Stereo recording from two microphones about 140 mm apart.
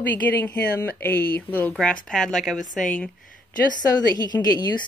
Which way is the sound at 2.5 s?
65° left (ahead or behind).